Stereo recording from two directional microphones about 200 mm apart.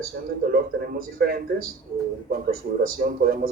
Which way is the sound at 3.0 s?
50° right (ahead or behind).